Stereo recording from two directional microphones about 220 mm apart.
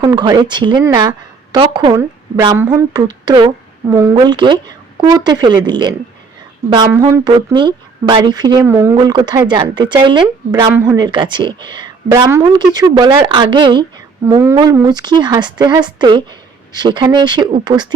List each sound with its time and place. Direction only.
0.0 s speech: 15° right (ahead or behind)